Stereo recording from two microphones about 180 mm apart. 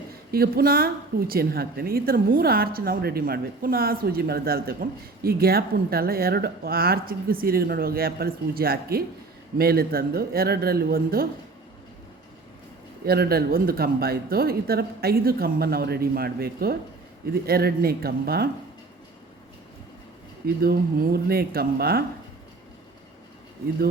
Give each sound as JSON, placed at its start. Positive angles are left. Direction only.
{"t": 0.3, "sound": "a woman's voice", "side_deg": -60}
{"t": 13.1, "sound": "a woman's voice", "side_deg": -60}
{"t": 20.6, "sound": "a woman's voice", "side_deg": -60}